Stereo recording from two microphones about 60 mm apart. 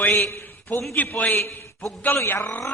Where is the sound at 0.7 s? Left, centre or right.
Left.